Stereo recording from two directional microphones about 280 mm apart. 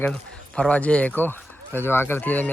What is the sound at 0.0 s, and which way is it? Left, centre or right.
Speech, centre.